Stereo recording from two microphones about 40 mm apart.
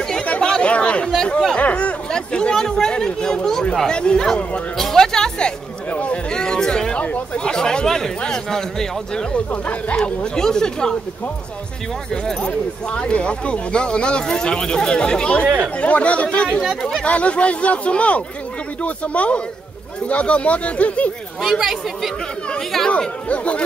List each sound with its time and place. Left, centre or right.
0.4 s chatter: left
1.6 s a sound: left
2.0 s a sound: left
3.8 s speech: left
4.9 s music: centre
5.9 s a sound: left
6.3 s a sound: centre
7.3 s speech: left
9.5 s speech: left
9.9 s speech: left
12.1 s speech: centre
12.9 s speech: left
21.4 s speech: centre
22.8 s speech: left